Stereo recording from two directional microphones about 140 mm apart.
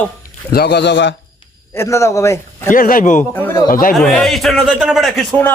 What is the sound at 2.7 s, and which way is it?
Speech, 85° left.